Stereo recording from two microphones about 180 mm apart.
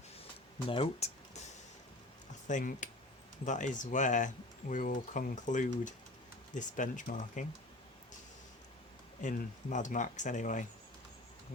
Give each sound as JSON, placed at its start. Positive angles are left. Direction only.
{"t": 0.7, "sound": "speech", "side_deg": 35}
{"t": 2.5, "sound": "speech", "side_deg": 45}
{"t": 9.2, "sound": "speech", "side_deg": 45}